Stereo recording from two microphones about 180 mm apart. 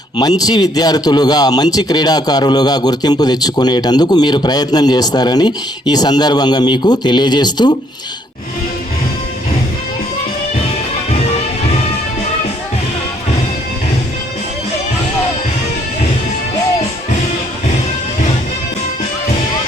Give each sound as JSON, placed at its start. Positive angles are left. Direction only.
{"t": 0.2, "sound": "a man's voice", "side_deg": 20}